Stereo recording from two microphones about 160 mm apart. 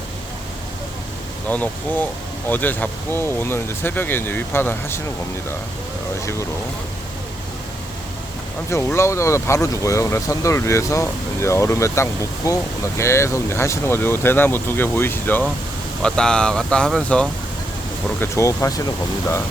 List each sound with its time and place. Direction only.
1.5 s speech: 10° left (ahead or behind)
8.7 s speech: 15° left (ahead or behind)
18.2 s speech: 20° left (ahead or behind)